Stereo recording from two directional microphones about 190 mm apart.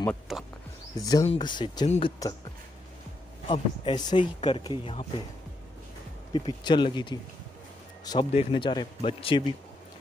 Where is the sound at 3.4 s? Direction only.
30° left (ahead or behind).